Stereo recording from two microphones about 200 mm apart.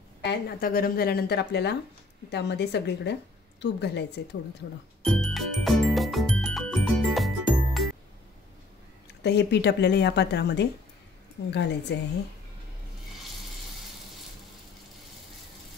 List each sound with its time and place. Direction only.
0.2 s speech: 55° left (ahead or behind)
5.0 s music: centre (ahead or behind)
9.2 s speech: 55° left (ahead or behind)